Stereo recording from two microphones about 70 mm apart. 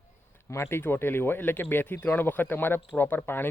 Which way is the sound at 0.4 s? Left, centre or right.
Left.